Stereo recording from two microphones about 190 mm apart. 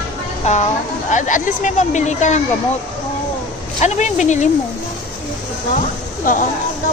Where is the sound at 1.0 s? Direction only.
40° left (ahead or behind).